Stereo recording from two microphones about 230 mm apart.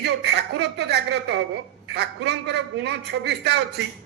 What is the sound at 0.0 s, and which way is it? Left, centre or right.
A man's voice, right.